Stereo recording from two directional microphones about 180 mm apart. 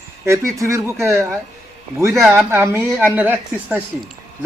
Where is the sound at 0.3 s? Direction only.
15° right (ahead or behind).